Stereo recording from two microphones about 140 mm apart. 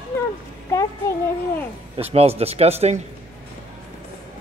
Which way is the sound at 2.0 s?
45° right (ahead or behind).